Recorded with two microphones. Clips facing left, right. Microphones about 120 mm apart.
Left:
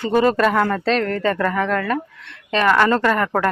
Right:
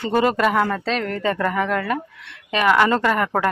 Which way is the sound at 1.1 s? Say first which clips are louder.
Left 2 dB; 20° right (ahead or behind).